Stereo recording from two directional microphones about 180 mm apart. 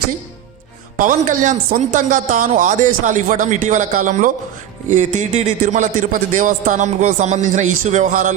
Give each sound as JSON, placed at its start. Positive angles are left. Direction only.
{"t": 0.9, "sound": "a man's voice", "side_deg": -45}